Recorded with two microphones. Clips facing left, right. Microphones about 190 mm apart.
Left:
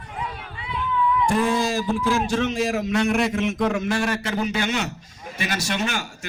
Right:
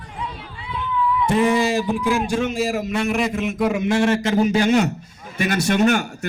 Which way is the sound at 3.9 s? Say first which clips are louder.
Right 6 dB; 25° right (ahead or behind).